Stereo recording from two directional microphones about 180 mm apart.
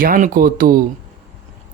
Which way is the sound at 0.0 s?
50° right (ahead or behind).